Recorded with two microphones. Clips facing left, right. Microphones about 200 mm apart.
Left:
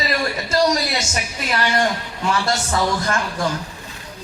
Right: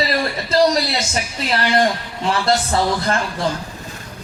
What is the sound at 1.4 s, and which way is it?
A man's voice, 30° right (ahead or behind).